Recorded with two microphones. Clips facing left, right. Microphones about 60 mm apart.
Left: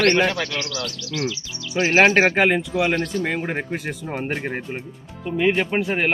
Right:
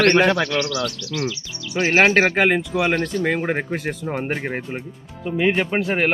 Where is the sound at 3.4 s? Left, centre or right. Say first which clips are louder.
Right 3 dB; centre.